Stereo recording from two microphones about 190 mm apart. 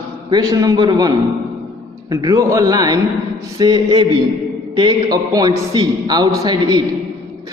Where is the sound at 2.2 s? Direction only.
15° right (ahead or behind).